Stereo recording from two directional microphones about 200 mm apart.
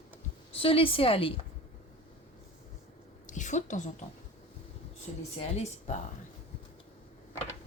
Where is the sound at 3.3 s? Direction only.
40° left (ahead or behind).